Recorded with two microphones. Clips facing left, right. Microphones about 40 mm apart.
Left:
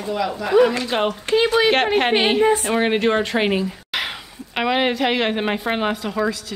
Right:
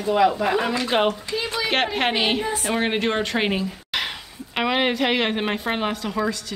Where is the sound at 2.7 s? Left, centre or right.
Centre.